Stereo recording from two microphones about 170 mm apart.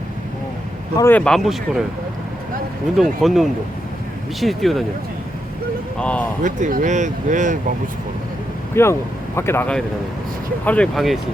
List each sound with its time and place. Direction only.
0.9 s speech: 10° left (ahead or behind)
3.0 s speech: centre (ahead or behind)
6.0 s speech: 10° left (ahead or behind)
6.4 s speech: 50° right (ahead or behind)
8.7 s speech: 15° left (ahead or behind)